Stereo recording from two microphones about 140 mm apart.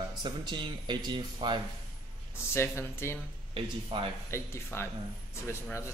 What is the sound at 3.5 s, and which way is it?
Speech, 40° right (ahead or behind).